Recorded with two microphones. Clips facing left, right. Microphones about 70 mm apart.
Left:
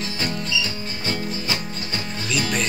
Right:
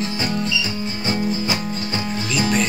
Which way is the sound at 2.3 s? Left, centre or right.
Centre.